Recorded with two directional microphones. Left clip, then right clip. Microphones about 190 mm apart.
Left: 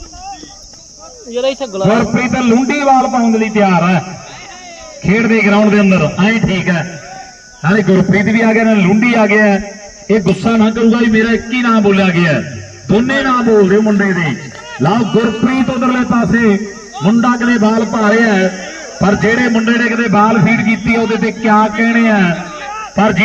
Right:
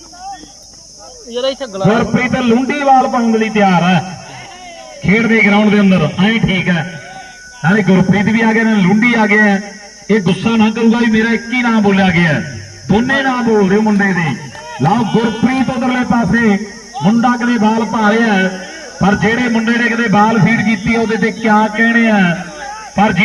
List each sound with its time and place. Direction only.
1.3 s speech: 15° left (ahead or behind)
1.9 s a man's voice: 40° right (ahead or behind)
5.0 s a man's voice: 40° right (ahead or behind)